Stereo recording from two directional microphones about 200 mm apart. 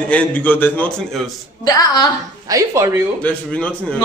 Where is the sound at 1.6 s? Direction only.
20° left (ahead or behind).